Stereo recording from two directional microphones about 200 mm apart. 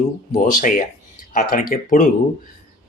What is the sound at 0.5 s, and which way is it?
Speech, 40° left (ahead or behind).